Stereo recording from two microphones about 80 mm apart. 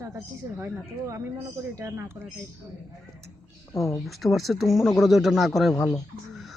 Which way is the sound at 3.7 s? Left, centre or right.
Left.